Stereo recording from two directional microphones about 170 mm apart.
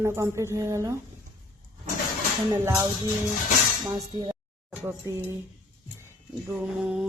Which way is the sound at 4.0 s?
20° right (ahead or behind).